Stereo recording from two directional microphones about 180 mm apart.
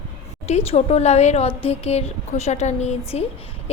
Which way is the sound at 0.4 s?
40° left (ahead or behind).